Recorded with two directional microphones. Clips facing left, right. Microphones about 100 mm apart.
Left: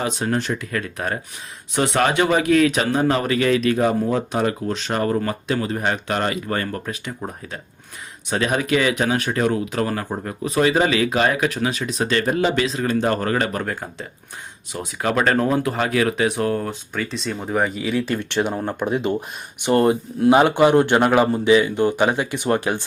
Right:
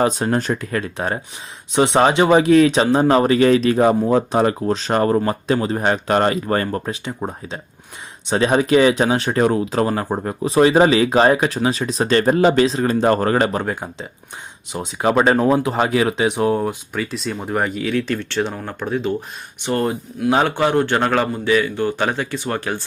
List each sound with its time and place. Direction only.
0.0 s speech: 40° right (ahead or behind); by 19.0 s 15° left (ahead or behind)
19.7 s speech: 30° left (ahead or behind)
20.3 s speech: 15° left (ahead or behind)